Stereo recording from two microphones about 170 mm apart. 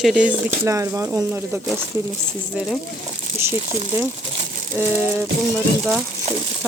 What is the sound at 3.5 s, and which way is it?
Speech, 40° right (ahead or behind).